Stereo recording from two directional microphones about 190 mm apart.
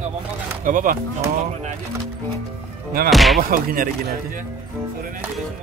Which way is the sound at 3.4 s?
50° right (ahead or behind).